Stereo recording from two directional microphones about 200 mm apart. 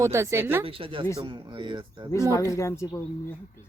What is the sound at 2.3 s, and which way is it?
Speech, 15° left (ahead or behind).